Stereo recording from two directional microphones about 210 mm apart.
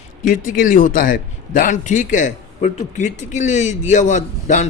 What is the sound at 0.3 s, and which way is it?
A man's voice, 40° left (ahead or behind).